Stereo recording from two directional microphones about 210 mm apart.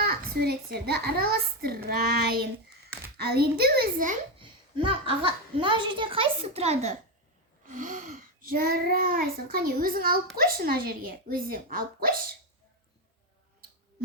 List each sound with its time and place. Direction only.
0.0 s a child's voice: 50° right (ahead or behind)
4.4 s a child's voice: 25° right (ahead or behind); by 12.1 s 45° right (ahead or behind)